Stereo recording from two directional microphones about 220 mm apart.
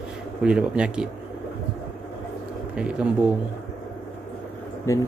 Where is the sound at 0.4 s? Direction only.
5° right (ahead or behind).